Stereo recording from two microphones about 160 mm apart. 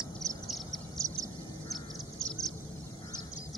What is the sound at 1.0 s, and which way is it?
Duck, 20° right (ahead or behind).